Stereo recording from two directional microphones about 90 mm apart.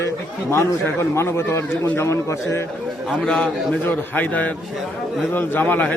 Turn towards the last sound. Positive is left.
turn(degrees=20)  # may be behind; listen again after turning